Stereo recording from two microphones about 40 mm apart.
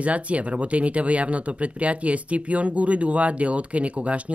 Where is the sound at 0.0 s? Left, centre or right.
Right.